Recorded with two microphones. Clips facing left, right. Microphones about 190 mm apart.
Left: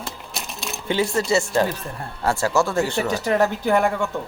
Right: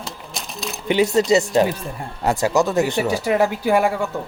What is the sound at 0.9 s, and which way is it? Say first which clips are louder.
Speech: right 5 dB; 20° right (ahead or behind).